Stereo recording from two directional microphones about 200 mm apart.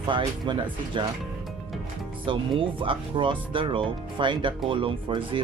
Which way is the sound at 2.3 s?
25° right (ahead or behind).